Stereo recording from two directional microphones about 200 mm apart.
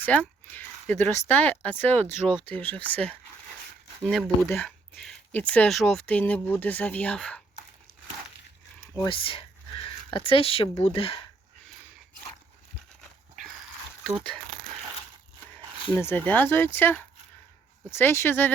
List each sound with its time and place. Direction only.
0.0 s speech: 10° left (ahead or behind)
2.3 s speech: 25° right (ahead or behind)
2.6 s speech: 5° left (ahead or behind)
4.4 s speech: 10° left (ahead or behind)
9.0 s speech: 25° left (ahead or behind)
16.0 s speech: 10° left (ahead or behind)